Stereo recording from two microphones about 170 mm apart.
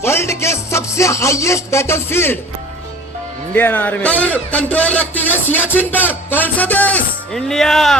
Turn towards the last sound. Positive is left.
turn(degrees=0)  # may be behind; listen again after turning